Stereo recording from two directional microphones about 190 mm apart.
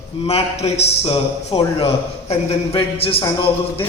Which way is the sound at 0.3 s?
35° left (ahead or behind).